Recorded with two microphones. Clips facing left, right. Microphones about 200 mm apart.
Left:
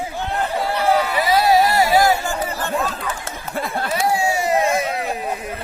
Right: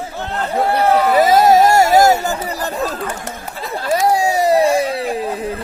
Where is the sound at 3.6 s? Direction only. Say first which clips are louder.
Left 8 dB; 55° left (ahead or behind).